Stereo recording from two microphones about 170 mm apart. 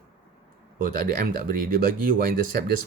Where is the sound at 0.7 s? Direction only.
55° right (ahead or behind).